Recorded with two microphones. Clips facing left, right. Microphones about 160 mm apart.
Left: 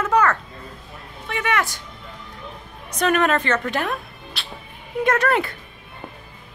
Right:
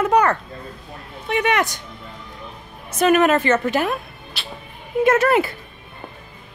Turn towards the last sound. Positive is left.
turn(degrees=-5)  # may be behind; listen again after turning